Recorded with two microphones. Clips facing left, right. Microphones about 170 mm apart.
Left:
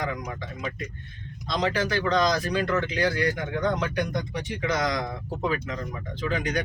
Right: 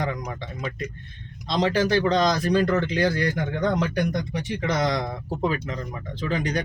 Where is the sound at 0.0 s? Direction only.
35° right (ahead or behind).